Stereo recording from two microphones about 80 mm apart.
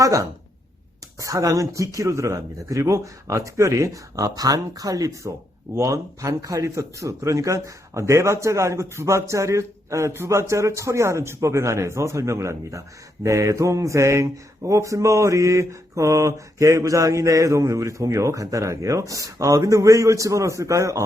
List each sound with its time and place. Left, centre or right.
0.0 s speech: right
5.7 s mantra: right